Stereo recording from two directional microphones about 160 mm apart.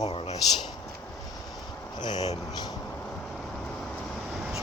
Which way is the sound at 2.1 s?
40° left (ahead or behind).